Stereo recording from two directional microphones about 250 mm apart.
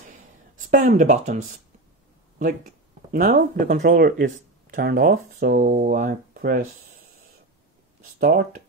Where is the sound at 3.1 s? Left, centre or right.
Right.